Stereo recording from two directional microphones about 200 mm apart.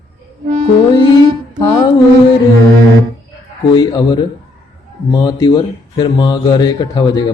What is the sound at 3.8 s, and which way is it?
A man's voice, 20° left (ahead or behind).